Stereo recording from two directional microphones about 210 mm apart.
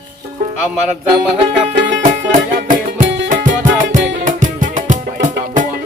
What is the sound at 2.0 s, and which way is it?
Music, 35° right (ahead or behind).